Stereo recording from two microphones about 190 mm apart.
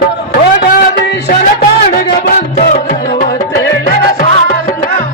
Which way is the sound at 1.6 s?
50° left (ahead or behind).